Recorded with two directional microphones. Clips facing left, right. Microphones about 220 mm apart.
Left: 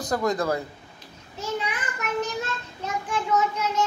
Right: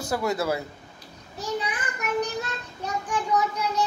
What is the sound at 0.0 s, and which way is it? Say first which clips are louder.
Speech: left 1 dB; 10° right (ahead or behind).